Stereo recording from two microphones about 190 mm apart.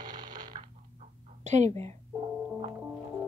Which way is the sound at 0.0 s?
20° right (ahead or behind).